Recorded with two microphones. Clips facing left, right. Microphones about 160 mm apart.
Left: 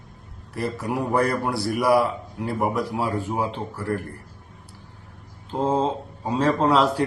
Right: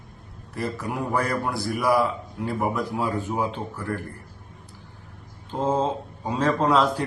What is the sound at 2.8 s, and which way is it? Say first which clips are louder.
A man's voice: left 1 dB; 5° left (ahead or behind).